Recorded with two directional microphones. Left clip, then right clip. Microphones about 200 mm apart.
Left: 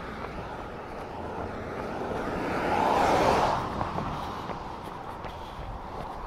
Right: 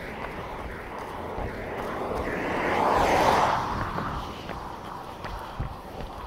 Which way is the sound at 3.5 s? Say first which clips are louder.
Right 2 dB; 5° right (ahead or behind).